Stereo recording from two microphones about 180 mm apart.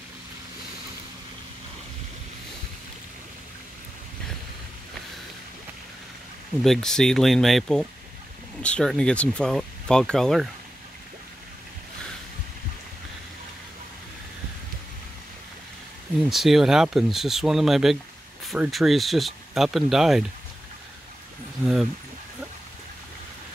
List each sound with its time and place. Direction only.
6.6 s speech: centre (ahead or behind)
16.2 s speech: centre (ahead or behind)